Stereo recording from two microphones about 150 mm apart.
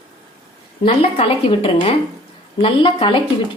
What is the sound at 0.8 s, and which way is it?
A woman's voice, 40° left (ahead or behind).